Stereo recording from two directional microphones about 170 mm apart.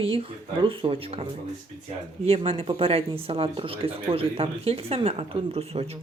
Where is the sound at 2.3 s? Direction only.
35° right (ahead or behind).